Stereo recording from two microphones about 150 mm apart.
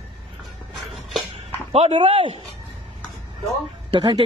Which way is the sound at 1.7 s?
40° right (ahead or behind).